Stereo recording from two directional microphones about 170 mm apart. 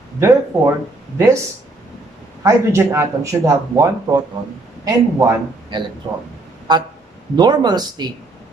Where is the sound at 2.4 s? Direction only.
15° right (ahead or behind).